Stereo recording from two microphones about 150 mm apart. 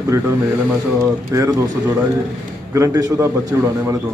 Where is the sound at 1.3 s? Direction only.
20° right (ahead or behind).